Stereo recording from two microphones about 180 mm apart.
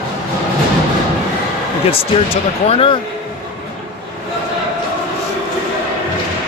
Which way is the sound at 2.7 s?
30° left (ahead or behind).